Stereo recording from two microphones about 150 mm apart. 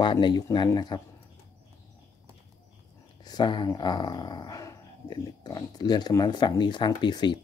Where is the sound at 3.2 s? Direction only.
30° left (ahead or behind).